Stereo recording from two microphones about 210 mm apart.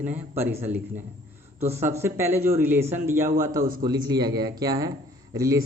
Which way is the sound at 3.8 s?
20° right (ahead or behind).